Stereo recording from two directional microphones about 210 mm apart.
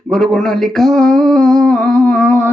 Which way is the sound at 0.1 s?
Centre (ahead or behind).